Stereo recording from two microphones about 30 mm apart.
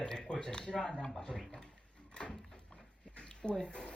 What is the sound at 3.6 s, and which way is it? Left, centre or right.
Speech, left.